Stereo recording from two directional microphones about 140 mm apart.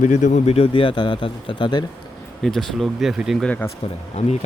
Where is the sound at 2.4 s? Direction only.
Centre (ahead or behind).